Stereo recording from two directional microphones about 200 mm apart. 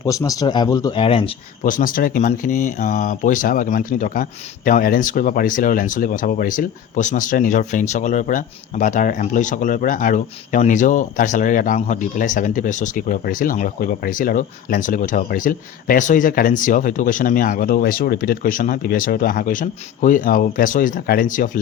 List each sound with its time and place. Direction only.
0.0 s speech: 15° left (ahead or behind)
1.6 s speech: 40° left (ahead or behind)